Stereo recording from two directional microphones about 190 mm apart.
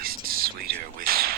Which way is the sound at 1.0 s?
50° right (ahead or behind).